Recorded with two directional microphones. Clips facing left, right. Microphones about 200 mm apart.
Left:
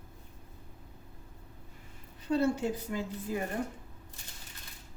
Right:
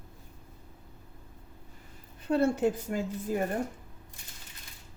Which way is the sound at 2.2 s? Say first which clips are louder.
Right 3 dB; 55° right (ahead or behind).